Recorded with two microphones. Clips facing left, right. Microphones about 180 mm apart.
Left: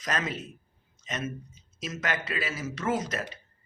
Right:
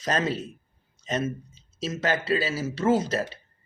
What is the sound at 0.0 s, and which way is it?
Speech, 30° right (ahead or behind).